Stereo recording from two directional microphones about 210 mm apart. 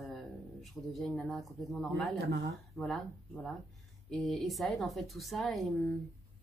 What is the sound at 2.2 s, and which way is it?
Speech, 50° right (ahead or behind).